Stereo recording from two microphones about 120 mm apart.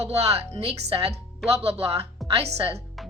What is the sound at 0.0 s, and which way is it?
A woman's voice, 60° right (ahead or behind).